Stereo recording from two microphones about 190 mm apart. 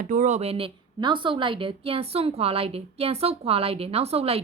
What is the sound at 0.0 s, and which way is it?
A woman's voice, 45° right (ahead or behind).